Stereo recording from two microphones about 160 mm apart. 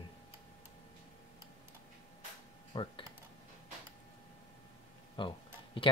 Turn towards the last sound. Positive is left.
turn(degrees=30)  # may be behind; listen again after turning